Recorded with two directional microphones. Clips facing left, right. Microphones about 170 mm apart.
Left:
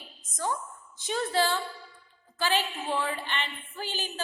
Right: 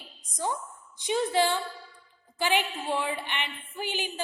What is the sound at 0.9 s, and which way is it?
A woman's voice, 15° right (ahead or behind).